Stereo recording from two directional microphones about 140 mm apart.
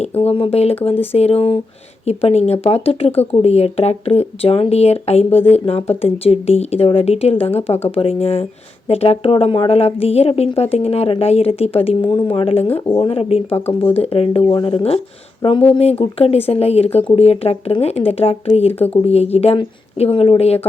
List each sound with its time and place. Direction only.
0.2 s speech: 40° left (ahead or behind)
15.7 s speech: 45° left (ahead or behind)